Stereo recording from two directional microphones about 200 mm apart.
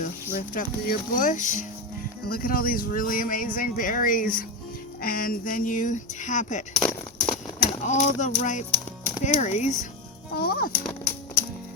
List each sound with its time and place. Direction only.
0.0 s speech: 40° left (ahead or behind)
6.7 s a sound: 5° left (ahead or behind)
7.9 s speech: 35° left (ahead or behind)
10.3 s speech: 50° left (ahead or behind)